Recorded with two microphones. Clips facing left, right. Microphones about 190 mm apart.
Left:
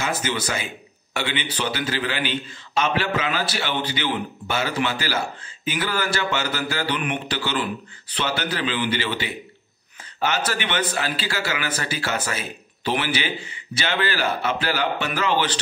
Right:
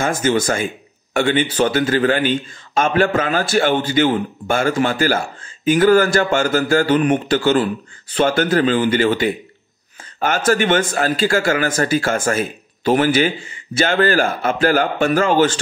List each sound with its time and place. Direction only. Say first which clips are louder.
0.0 s speech: right 8 dB; 50° right (ahead or behind)